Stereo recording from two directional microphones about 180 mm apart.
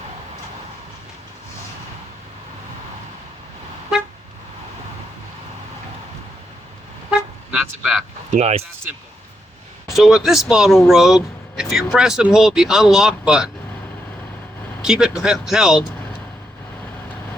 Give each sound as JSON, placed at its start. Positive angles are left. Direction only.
{"t": 7.1, "sound": "toot", "side_deg": -5}
{"t": 8.3, "sound": "speech", "side_deg": -40}
{"t": 9.9, "sound": "speech", "side_deg": 0}
{"t": 14.8, "sound": "speech", "side_deg": -5}